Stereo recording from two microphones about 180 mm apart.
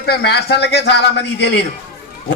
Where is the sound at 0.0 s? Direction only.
65° left (ahead or behind).